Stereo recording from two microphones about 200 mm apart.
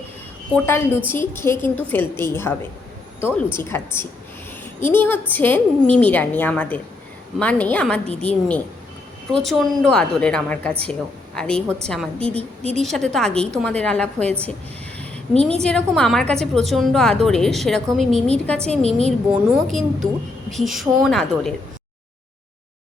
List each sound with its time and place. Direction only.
0.5 s a woman's voice: 10° left (ahead or behind)
12.3 s a woman's voice: 30° right (ahead or behind)
12.7 s a woman's voice: centre (ahead or behind)
14.9 s a sound: 5° left (ahead or behind)
15.6 s a woman's voice: 5° left (ahead or behind)